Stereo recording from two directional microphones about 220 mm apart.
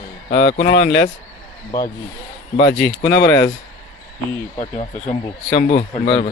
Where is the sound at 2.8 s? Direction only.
45° left (ahead or behind).